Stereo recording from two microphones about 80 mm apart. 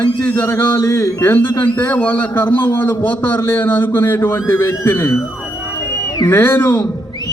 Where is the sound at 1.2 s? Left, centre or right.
Left.